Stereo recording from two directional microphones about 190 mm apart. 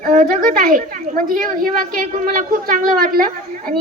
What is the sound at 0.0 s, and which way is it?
A woman's voice, 45° right (ahead or behind).